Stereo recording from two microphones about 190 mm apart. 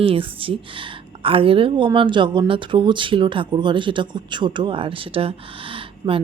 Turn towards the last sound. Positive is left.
turn(degrees=-25)  # may be behind; listen again after turning